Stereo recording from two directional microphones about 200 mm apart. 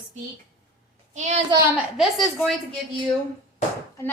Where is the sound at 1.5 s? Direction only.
15° right (ahead or behind).